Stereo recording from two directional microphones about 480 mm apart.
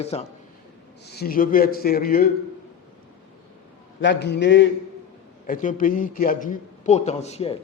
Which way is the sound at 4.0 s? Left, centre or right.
Left.